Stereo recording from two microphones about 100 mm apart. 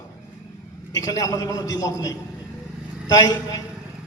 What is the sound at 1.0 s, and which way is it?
A man's voice, 35° left (ahead or behind).